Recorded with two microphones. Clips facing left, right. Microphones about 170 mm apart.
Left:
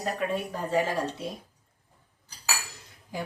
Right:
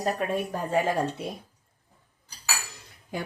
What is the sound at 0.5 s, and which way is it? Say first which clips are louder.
Speech: right 2 dB; 50° right (ahead or behind).